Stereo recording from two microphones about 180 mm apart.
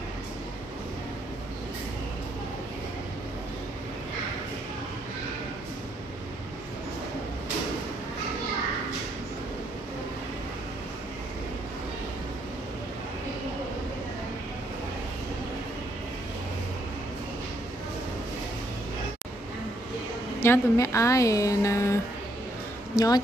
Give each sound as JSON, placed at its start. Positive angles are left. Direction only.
{"t": 20.3, "sound": "a woman's voice", "side_deg": 15}